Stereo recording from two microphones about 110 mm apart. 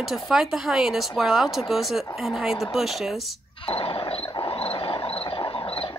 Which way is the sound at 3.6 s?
60° left (ahead or behind).